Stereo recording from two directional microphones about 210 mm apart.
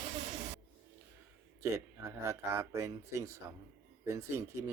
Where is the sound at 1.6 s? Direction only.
15° right (ahead or behind).